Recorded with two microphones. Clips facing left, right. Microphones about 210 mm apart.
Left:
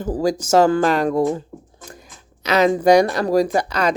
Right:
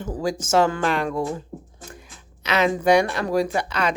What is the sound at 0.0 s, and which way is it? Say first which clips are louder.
Speech: left 6 dB; 40° left (ahead or behind).